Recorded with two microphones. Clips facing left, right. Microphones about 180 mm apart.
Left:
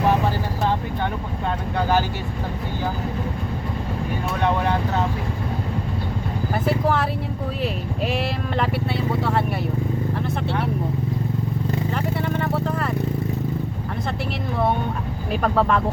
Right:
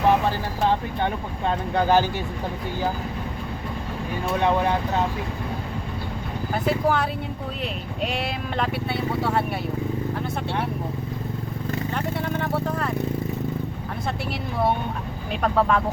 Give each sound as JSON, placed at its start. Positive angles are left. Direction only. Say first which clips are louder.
{"t": 6.5, "sound": "speech", "louder": "even", "side_deg": 0}
{"t": 11.9, "sound": "a sound", "louder": "left 2 dB", "side_deg": 0}
{"t": 15.3, "sound": "speech", "louder": "left 1 dB", "side_deg": 0}